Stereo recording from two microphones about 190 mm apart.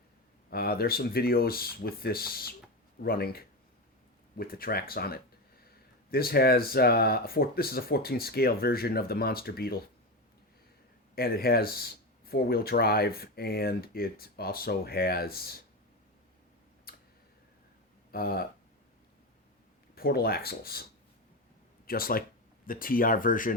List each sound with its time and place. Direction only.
0.5 s speech: 55° left (ahead or behind)
11.1 s speech: 55° left (ahead or behind)
16.9 s tick: 50° left (ahead or behind)
18.1 s speech: 55° left (ahead or behind)
20.0 s speech: 55° left (ahead or behind)
21.8 s speech: 50° left (ahead or behind)